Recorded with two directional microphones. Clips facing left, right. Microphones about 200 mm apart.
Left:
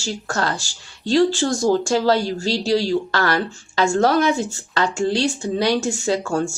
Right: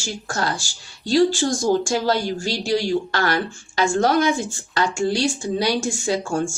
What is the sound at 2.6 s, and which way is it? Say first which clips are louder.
Speech: left 1 dB; 40° left (ahead or behind).